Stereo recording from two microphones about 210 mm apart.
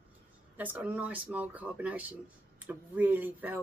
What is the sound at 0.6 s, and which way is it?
Speech, 5° right (ahead or behind).